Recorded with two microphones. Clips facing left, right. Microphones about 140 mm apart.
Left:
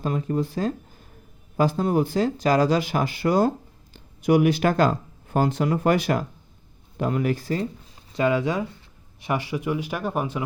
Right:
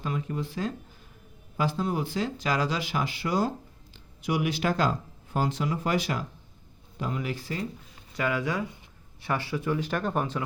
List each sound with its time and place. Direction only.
0.0 s speech: 40° left (ahead or behind)
8.1 s speech: 25° left (ahead or behind)